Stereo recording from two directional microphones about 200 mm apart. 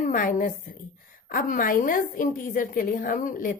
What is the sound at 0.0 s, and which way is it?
A woman's voice, 45° left (ahead or behind).